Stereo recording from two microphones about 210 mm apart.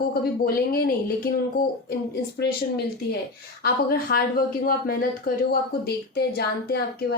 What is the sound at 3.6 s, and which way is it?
Speech, 45° left (ahead or behind).